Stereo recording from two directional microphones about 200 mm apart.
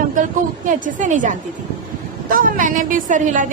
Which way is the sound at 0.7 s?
40° right (ahead or behind).